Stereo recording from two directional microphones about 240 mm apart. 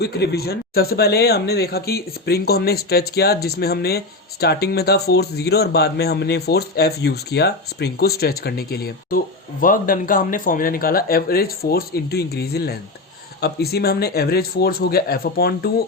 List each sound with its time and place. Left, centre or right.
0.0 s speech: left